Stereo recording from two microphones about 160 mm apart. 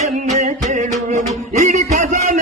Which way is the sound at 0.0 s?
50° right (ahead or behind).